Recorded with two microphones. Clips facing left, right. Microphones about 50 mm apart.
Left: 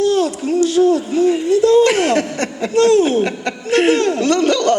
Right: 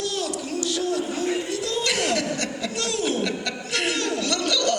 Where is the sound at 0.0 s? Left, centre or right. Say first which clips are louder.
Left 12 dB; left.